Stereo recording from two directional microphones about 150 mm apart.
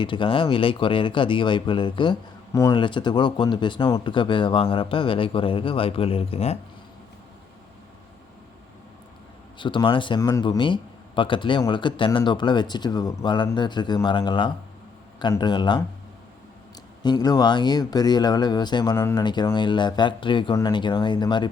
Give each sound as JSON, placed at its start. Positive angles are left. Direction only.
{"t": 0.0, "sound": "speech", "side_deg": 35}
{"t": 9.6, "sound": "speech", "side_deg": 35}
{"t": 17.0, "sound": "speech", "side_deg": 25}